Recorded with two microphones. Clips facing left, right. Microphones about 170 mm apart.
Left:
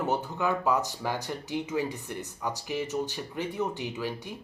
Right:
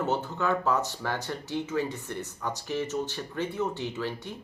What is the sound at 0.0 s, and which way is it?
Speech, 15° left (ahead or behind).